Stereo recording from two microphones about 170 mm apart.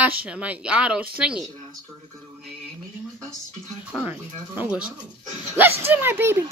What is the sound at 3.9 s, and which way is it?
Speech, 10° right (ahead or behind).